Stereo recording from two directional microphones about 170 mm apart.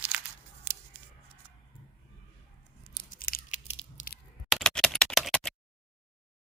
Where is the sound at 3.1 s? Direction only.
60° left (ahead or behind).